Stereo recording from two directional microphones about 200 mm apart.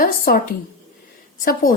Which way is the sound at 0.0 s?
45° left (ahead or behind).